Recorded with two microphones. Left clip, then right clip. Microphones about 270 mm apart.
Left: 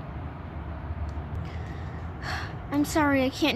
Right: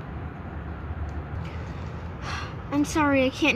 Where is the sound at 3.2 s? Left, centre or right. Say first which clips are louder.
Right 3 dB; left.